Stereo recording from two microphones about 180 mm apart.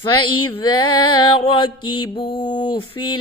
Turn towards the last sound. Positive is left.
turn(degrees=25)  # may be behind; listen again after turning